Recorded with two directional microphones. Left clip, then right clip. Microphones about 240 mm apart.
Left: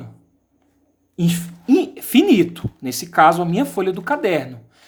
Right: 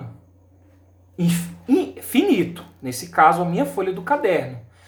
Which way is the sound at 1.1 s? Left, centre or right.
Left.